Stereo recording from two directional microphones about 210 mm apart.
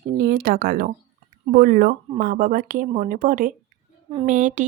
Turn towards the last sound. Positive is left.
turn(degrees=-35)  # may be behind; listen again after turning